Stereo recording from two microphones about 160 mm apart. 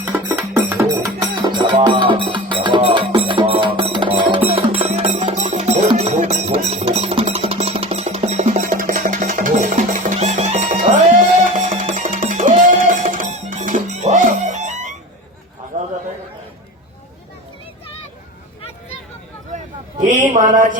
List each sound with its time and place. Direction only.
0.0 s music: 15° right (ahead or behind)
1.5 s music: 30° right (ahead or behind); by 14.9 s 50° right (ahead or behind)
15.7 s chatter: 50° right (ahead or behind)
19.5 s a sound: 50° right (ahead or behind)